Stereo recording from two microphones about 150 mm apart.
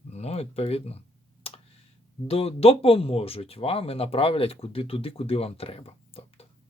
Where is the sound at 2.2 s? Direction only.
40° left (ahead or behind).